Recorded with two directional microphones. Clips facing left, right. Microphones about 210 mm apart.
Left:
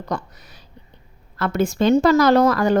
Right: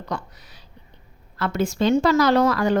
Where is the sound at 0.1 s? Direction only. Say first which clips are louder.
Left 3 dB; 45° left (ahead or behind).